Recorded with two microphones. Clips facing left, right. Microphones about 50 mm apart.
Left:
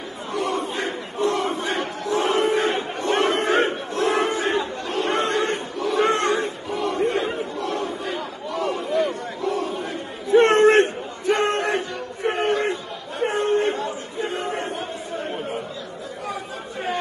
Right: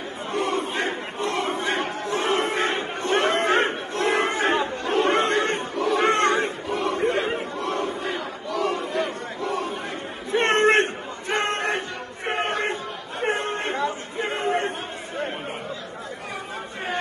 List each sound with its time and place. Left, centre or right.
0.3 s crowd: right
3.0 s chatter: right
3.4 s battle cry: right
5.9 s a sound: right
6.9 s chatter: right
10.3 s a sound: right
13.2 s chatter: right